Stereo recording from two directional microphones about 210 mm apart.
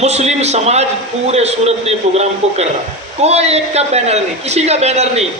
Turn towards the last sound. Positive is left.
turn(degrees=-30)  # may be behind; listen again after turning